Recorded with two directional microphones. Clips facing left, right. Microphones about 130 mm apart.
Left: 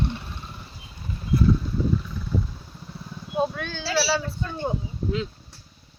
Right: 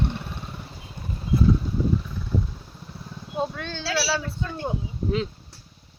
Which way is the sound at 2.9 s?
5° right (ahead or behind).